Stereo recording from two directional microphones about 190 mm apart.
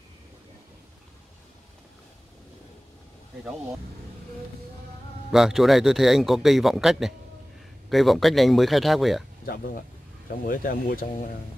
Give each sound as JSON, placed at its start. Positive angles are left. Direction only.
{"t": 5.3, "sound": "a man's voice", "side_deg": 0}
{"t": 10.4, "sound": "speech", "side_deg": 45}